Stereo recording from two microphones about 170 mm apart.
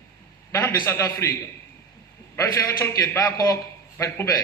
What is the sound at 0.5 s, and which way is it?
A man's voice, 20° left (ahead or behind).